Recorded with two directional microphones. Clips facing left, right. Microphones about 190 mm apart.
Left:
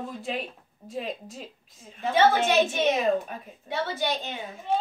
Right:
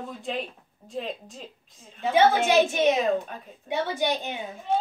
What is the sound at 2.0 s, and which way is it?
A woman's voice, 10° right (ahead or behind).